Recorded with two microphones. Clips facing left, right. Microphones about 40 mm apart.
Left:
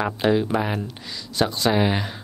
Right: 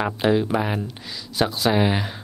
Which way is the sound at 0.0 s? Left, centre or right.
Centre.